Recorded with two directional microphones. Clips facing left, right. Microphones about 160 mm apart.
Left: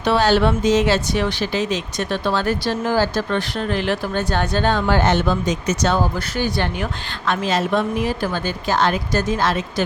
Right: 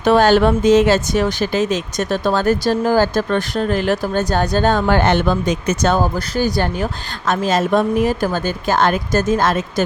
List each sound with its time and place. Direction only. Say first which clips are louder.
0.0 s speech: right 4 dB; 50° right (ahead or behind)